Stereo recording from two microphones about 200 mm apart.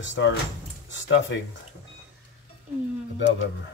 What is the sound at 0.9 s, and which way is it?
Speech, 65° left (ahead or behind).